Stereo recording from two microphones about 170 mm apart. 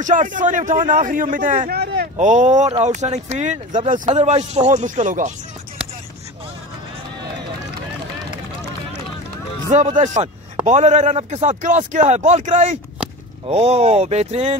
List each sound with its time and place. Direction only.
0.0 s a man's voice: 50° right (ahead or behind); by 2.0 s 65° right (ahead or behind)
2.1 s a man's voice: 45° right (ahead or behind)
9.7 s a man's voice: 45° right (ahead or behind)